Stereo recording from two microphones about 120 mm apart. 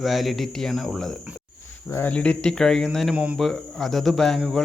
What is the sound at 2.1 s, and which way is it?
A man's voice, 10° left (ahead or behind).